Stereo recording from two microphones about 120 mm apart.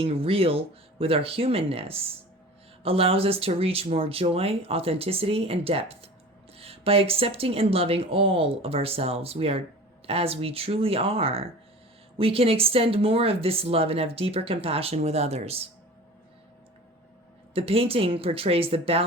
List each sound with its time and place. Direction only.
0.0 s speech: 50° right (ahead or behind)
17.5 s speech: 50° right (ahead or behind)